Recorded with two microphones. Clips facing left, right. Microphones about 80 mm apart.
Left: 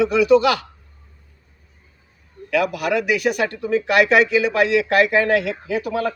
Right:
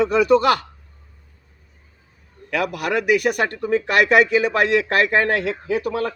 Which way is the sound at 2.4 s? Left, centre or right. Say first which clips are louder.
Left 3 dB; right.